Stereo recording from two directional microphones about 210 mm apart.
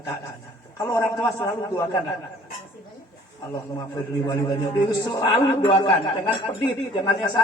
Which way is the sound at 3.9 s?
20° left (ahead or behind).